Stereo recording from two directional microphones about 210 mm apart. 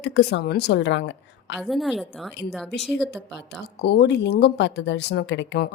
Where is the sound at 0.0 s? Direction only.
55° left (ahead or behind).